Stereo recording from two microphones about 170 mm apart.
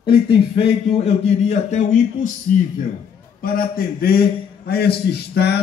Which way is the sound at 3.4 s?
60° left (ahead or behind).